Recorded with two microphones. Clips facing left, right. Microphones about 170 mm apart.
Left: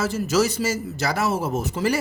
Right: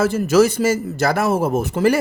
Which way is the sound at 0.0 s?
55° right (ahead or behind).